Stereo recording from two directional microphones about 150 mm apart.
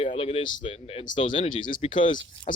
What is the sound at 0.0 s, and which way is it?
Speech, 40° left (ahead or behind).